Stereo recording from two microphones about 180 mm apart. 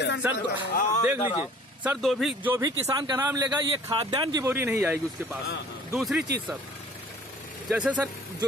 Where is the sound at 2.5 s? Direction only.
20° right (ahead or behind).